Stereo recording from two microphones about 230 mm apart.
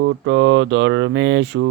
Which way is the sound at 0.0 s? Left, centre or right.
Right.